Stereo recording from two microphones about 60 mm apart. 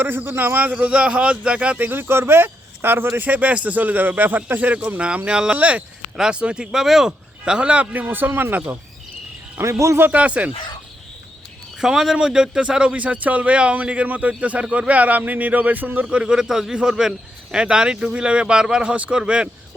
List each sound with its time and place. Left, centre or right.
0.0 s a man's voice: right
0.8 s speech: right
1.9 s a man's voice: right; by 8.0 s centre
8.0 s a man's voice: right
9.6 s speech: right
10.1 s speech: right
11.8 s a man's voice: centre; by 16.0 s right
16.0 s a man's voice: centre